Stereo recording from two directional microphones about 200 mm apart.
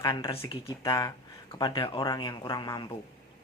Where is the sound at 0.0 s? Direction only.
25° left (ahead or behind).